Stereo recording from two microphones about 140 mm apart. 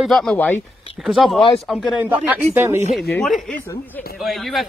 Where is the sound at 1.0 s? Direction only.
Centre (ahead or behind).